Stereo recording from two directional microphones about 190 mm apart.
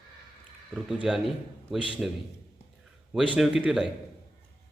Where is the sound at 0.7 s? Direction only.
5° right (ahead or behind).